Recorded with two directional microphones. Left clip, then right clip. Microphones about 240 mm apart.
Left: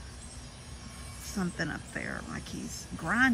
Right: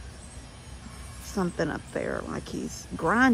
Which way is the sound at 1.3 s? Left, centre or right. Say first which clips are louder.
Right 6 dB; centre.